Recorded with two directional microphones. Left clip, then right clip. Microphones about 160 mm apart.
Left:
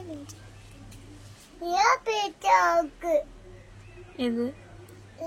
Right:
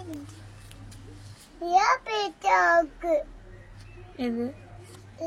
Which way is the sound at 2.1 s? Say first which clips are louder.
Left 2 dB; 25° left (ahead or behind).